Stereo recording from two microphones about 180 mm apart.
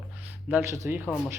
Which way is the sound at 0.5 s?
15° right (ahead or behind).